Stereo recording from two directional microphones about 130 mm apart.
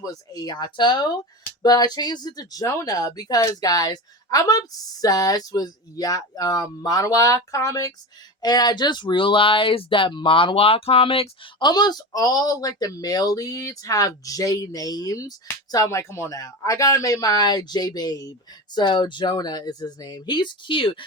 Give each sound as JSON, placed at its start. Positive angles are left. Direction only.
{"t": 0.0, "sound": "speech", "side_deg": 30}